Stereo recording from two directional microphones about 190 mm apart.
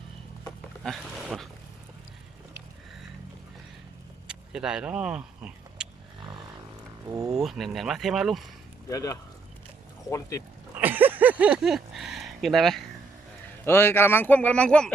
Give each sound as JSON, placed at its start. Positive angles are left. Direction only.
{"t": 0.9, "sound": "speech", "side_deg": 0}
{"t": 4.3, "sound": "vehicle", "side_deg": -5}
{"t": 7.3, "sound": "speech", "side_deg": 0}
{"t": 8.9, "sound": "speech", "side_deg": 15}
{"t": 10.8, "sound": "a sound", "side_deg": -10}
{"t": 13.7, "sound": "speech", "side_deg": 10}